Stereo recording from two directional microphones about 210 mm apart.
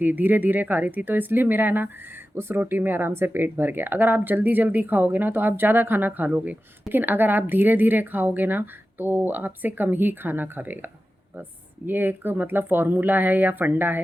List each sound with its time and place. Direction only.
0.0 s speech: 10° right (ahead or behind)